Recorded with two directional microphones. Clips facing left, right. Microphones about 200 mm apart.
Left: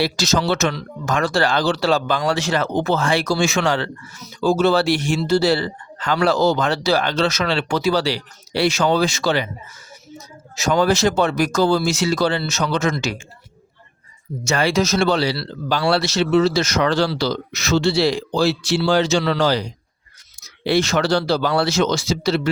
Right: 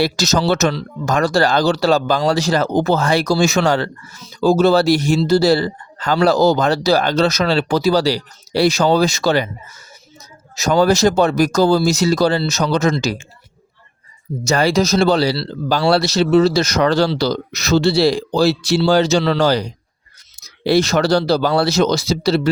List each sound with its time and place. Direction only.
0.0 s speech: 40° right (ahead or behind)
10.5 s speech: 40° right (ahead or behind)
14.4 s speech: 35° right (ahead or behind)